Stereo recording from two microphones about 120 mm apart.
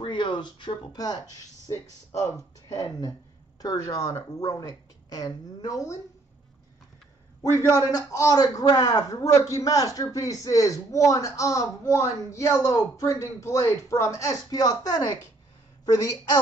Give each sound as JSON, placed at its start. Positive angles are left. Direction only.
{"t": 0.0, "sound": "speech", "side_deg": 40}
{"t": 7.9, "sound": "a man's voice", "side_deg": 30}